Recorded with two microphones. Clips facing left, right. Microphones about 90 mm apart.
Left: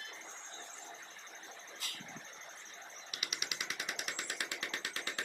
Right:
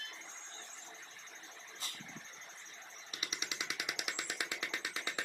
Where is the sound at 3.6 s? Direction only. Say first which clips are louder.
Even; 10° right (ahead or behind).